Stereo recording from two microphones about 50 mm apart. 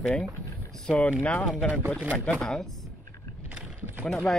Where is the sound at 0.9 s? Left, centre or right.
Left.